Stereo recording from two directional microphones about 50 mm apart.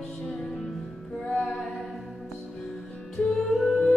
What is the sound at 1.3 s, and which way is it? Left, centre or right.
Music, centre.